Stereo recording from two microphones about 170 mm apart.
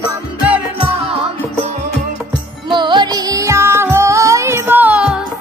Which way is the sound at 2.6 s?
25° right (ahead or behind).